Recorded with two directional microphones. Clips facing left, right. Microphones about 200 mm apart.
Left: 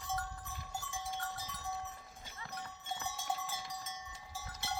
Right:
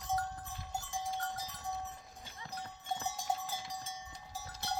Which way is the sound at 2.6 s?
35° right (ahead or behind).